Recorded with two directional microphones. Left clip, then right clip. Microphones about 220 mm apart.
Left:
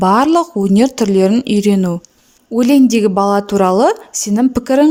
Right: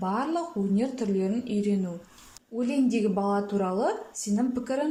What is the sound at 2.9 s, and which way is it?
A woman's voice, 40° left (ahead or behind).